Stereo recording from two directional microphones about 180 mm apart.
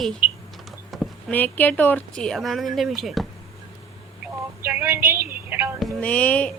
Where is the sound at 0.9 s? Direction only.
Centre (ahead or behind).